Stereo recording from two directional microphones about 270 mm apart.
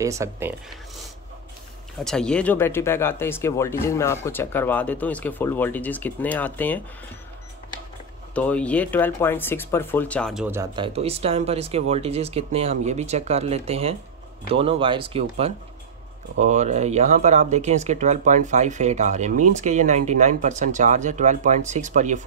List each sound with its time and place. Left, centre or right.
0.0 s speech: centre
2.0 s speech: centre
8.4 s speech: centre
10.9 s speech: right